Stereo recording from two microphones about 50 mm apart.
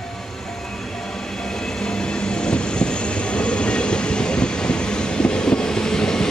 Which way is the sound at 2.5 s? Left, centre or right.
Centre.